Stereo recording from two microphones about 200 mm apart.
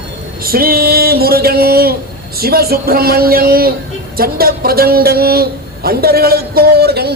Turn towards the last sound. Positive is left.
turn(degrees=-55)  # may be behind; listen again after turning